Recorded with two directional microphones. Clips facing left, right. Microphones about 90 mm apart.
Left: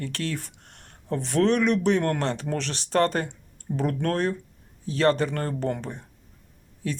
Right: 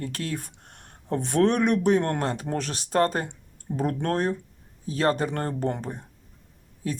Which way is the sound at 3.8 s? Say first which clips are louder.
Even; 30° right (ahead or behind).